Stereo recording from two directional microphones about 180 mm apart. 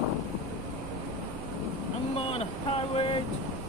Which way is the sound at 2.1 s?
35° left (ahead or behind).